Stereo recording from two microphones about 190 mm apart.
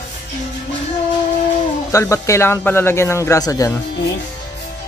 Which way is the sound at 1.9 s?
15° left (ahead or behind).